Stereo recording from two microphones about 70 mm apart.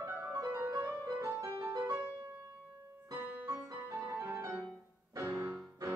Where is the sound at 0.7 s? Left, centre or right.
Right.